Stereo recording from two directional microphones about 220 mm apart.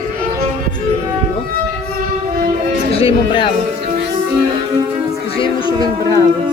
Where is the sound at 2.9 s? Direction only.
25° left (ahead or behind).